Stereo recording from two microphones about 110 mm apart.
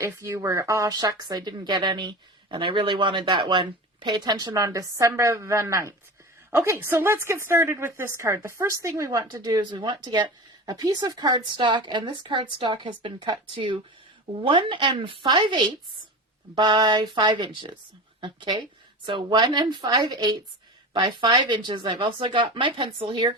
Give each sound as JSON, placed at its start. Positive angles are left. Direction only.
{"t": 0.0, "sound": "a woman's voice", "side_deg": -25}